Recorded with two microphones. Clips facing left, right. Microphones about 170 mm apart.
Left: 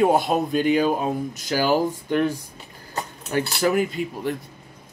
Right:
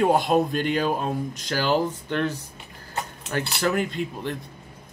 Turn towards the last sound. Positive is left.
turn(degrees=5)  # may be behind; listen again after turning